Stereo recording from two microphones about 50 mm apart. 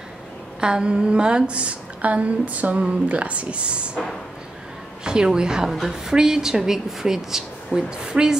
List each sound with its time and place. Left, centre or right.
0.6 s a woman's voice: centre
5.0 s a woman's voice: centre